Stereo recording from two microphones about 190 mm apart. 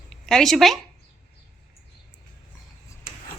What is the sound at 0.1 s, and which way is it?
Speech, centre (ahead or behind).